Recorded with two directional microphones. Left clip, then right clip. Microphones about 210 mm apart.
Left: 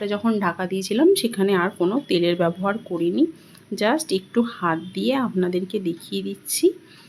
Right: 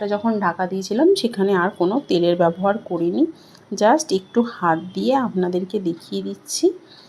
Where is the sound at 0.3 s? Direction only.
15° left (ahead or behind).